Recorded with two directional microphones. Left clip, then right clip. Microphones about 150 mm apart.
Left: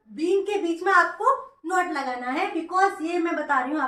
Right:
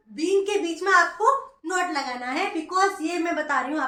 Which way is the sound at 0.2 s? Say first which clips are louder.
Right 1 dB; 5° left (ahead or behind).